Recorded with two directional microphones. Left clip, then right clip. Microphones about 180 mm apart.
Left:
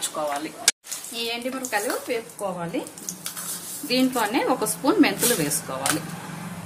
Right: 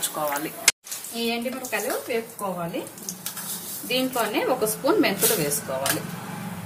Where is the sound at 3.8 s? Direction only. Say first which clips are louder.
Left 2 dB; 35° left (ahead or behind).